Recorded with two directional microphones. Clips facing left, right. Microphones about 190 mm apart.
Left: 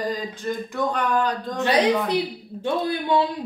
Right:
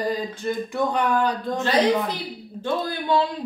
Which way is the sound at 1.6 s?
15° left (ahead or behind).